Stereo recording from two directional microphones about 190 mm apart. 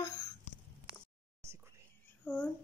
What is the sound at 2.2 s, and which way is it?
Speech, 10° left (ahead or behind).